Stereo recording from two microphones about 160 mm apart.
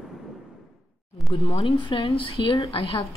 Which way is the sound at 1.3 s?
35° left (ahead or behind).